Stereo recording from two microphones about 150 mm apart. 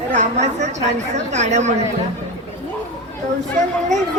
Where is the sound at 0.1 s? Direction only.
60° right (ahead or behind).